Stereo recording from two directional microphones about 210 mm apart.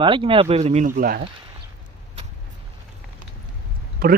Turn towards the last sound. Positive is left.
turn(degrees=-45)  # may be behind; listen again after turning